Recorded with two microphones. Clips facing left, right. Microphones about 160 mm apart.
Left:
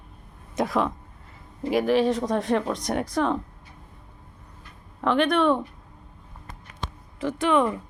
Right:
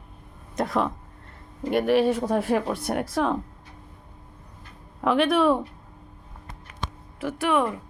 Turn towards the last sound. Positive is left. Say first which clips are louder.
# left 2 dB
turn(degrees=-5)  # may be behind; listen again after turning